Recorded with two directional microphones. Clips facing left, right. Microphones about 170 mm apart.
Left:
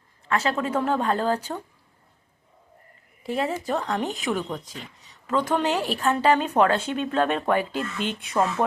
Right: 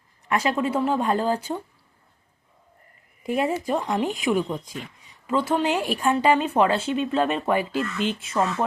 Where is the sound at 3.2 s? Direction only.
10° right (ahead or behind).